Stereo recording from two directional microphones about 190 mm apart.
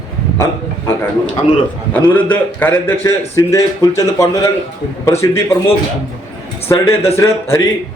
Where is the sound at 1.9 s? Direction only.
10° left (ahead or behind).